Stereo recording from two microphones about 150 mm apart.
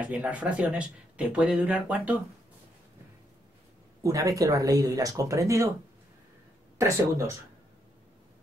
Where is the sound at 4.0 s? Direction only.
20° right (ahead or behind).